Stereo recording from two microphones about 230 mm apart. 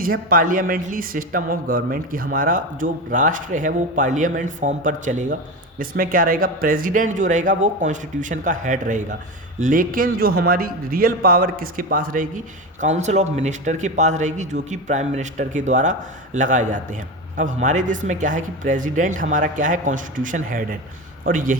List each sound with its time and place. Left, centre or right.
0.0 s a man's voice: right